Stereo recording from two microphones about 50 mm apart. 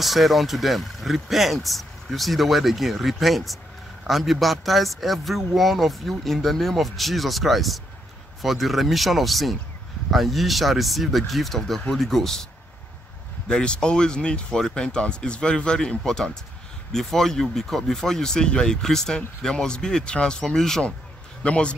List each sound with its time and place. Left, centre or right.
0.0 s a man's voice: centre
13.5 s speech: centre
21.4 s a man's voice: left